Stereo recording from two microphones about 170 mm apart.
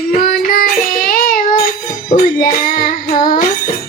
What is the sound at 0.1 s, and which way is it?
Child singing, 55° left (ahead or behind).